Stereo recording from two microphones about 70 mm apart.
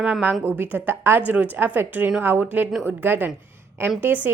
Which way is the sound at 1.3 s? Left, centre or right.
Right.